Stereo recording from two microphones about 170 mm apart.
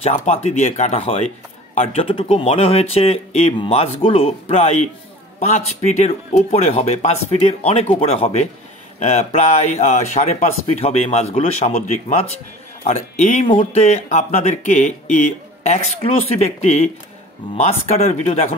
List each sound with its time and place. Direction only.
0.0 s speech: 35° left (ahead or behind)
12.8 s speech: 40° left (ahead or behind)